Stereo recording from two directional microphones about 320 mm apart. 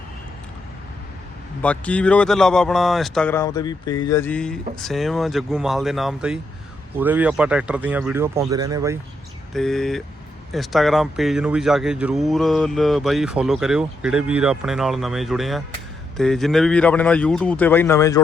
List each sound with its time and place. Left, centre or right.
1.6 s speech: centre
9.5 s speech: centre